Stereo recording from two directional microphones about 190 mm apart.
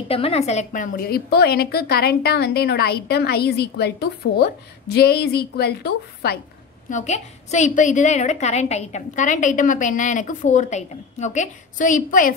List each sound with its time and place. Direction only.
0.1 s a woman's voice: 30° left (ahead or behind); by 6.4 s 55° left (ahead or behind)
6.9 s a woman's voice: 40° left (ahead or behind)